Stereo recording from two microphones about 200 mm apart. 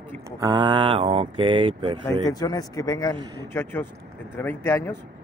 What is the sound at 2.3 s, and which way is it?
A man's voice, 20° left (ahead or behind).